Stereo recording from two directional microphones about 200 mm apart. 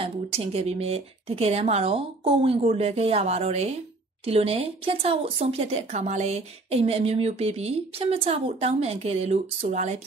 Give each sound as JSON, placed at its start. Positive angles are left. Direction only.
{"t": 0.0, "sound": "speech", "side_deg": -30}